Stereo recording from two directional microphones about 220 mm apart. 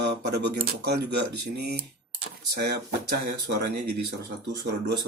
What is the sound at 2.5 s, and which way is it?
Speech, 45° right (ahead or behind).